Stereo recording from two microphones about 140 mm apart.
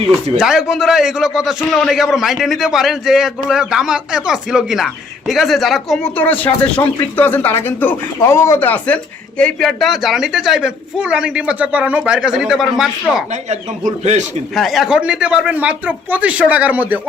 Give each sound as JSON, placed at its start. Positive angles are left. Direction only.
{"t": 0.3, "sound": "a man's voice", "side_deg": -5}
{"t": 6.1, "sound": "a man's voice", "side_deg": 15}
{"t": 13.3, "sound": "a man's voice", "side_deg": -55}
{"t": 14.5, "sound": "speech", "side_deg": 0}